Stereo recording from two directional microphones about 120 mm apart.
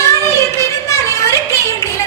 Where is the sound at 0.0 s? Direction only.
25° left (ahead or behind).